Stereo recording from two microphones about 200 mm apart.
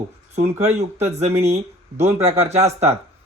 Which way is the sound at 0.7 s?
35° right (ahead or behind).